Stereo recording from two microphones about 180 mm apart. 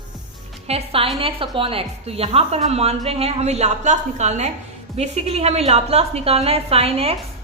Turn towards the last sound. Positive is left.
turn(degrees=-35)  # may be behind; listen again after turning